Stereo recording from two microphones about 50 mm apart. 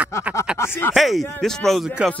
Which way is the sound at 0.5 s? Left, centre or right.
Left.